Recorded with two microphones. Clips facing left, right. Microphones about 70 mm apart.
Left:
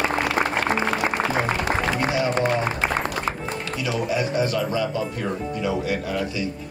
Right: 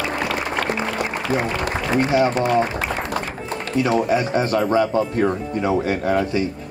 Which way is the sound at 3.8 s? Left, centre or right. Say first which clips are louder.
Right 5 dB; right.